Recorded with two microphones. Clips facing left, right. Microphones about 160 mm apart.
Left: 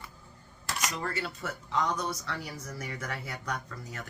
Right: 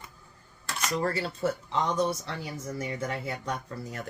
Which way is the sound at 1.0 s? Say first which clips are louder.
Right 6 dB; 35° right (ahead or behind).